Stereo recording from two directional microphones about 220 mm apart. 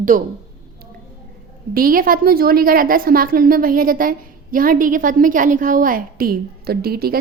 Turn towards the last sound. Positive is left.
turn(degrees=-45)  # may be behind; listen again after turning